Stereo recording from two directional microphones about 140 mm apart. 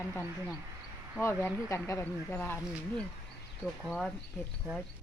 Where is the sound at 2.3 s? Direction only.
5° left (ahead or behind).